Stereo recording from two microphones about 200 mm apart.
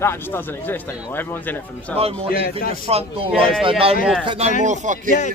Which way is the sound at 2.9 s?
30° right (ahead or behind).